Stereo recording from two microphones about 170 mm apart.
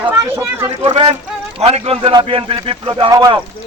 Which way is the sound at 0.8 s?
30° right (ahead or behind).